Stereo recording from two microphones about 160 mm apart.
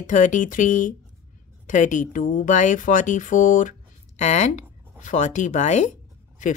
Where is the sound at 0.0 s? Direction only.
50° left (ahead or behind).